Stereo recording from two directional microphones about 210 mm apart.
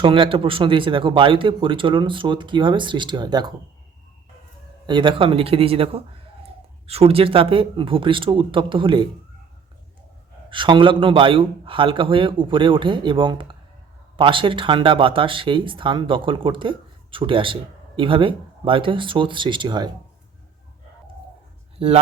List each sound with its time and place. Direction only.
0.0 s speech: 25° right (ahead or behind)
4.9 s speech: 20° right (ahead or behind)
10.5 s speech: 25° right (ahead or behind)
21.8 s speech: 30° right (ahead or behind)